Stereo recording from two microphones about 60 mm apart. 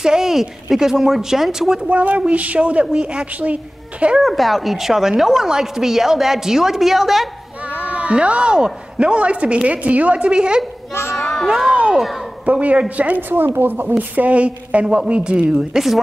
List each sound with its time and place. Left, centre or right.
0.0 s speech: centre
1.9 s a woman's voice: right
4.2 s a woman's voice: centre
7.8 s a woman's voice: right
11.1 s a sound: centre
11.7 s a sound: centre
12.4 s a woman's voice: right; by 16.0 s centre